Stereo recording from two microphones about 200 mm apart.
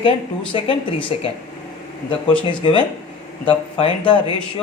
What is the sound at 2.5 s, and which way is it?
Speech, 25° left (ahead or behind).